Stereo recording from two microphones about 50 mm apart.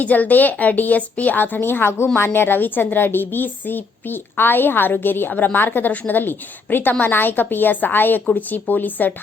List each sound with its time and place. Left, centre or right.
0.0 s a woman's voice: left